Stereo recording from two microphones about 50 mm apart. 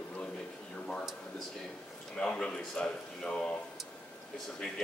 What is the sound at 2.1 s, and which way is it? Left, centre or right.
A man's voice, centre.